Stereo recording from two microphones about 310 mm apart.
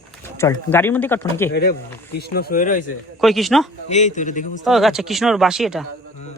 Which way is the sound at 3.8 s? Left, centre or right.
Left.